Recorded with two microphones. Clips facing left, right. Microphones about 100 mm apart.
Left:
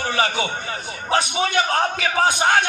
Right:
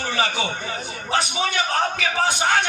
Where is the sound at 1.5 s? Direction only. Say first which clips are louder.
Left 2 dB; 45° left (ahead or behind).